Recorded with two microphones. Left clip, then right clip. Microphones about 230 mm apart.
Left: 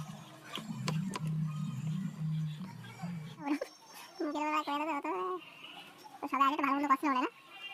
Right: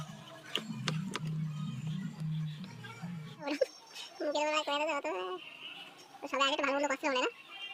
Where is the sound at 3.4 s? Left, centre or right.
Centre.